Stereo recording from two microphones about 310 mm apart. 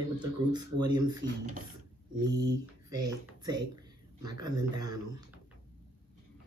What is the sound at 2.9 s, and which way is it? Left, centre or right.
Speech, centre.